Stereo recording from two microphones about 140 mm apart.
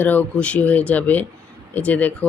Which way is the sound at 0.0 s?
10° left (ahead or behind).